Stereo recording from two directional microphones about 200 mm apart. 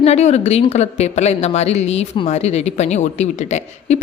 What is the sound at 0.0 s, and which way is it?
A woman's voice, 35° left (ahead or behind).